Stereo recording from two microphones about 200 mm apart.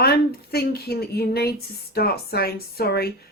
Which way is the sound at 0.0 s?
50° left (ahead or behind).